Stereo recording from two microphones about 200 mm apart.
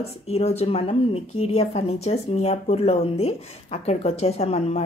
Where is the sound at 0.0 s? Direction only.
30° left (ahead or behind).